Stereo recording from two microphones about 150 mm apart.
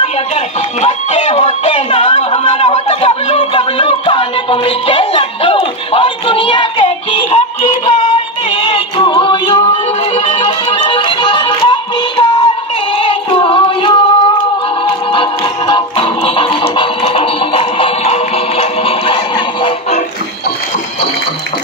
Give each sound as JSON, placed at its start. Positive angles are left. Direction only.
{"t": 0.7, "sound": "speech", "side_deg": 40}
{"t": 9.7, "sound": "music", "side_deg": 40}
{"t": 12.9, "sound": "child singing", "side_deg": 35}
{"t": 14.9, "sound": "music", "side_deg": 30}